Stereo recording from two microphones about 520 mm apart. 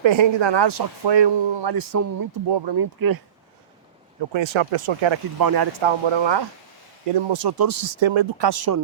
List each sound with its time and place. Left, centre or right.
0.0 s speech: right
2.5 s speech: right
4.2 s speech: right
5.4 s speech: right
5.8 s speech: right
8.0 s speech: right